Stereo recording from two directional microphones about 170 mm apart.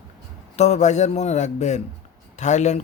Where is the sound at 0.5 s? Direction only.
40° left (ahead or behind).